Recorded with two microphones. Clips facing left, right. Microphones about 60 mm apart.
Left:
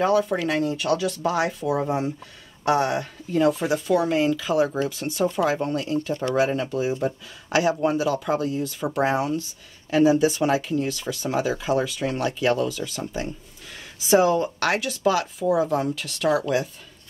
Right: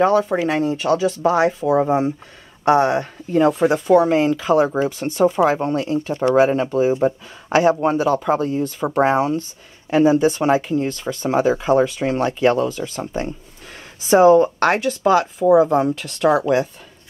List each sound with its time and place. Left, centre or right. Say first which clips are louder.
0.2 s speech: right 4 dB; centre
2.6 s speech: right 6 dB; right
4.6 s speech: right 5 dB; right
5.0 s speech: right 7 dB; right